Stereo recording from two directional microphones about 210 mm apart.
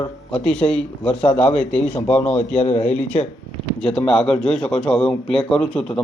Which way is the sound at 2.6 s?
30° left (ahead or behind).